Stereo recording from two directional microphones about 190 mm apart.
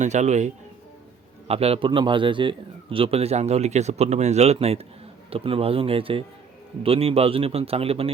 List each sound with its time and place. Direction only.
0.0 s a man's voice: 40° right (ahead or behind)